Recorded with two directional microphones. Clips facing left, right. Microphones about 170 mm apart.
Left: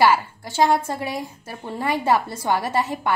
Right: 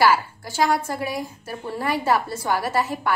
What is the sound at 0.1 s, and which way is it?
A woman's voice, 20° left (ahead or behind).